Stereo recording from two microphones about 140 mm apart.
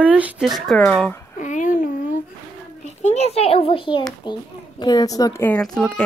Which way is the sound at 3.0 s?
50° left (ahead or behind).